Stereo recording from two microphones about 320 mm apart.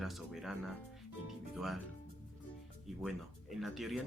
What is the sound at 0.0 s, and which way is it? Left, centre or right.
Speech, centre.